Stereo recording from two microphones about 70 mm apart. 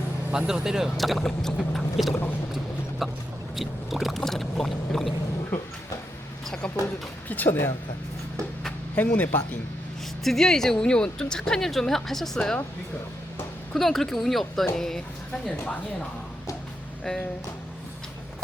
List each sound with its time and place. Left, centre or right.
0.3 s speech: centre
3.5 s boat: centre
7.3 s speech: left
9.0 s speech: left
10.2 s a woman's voice: centre
13.7 s speech: centre
17.0 s speech: centre